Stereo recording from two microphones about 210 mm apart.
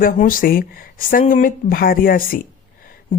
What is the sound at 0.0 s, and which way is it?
Speech, 40° left (ahead or behind).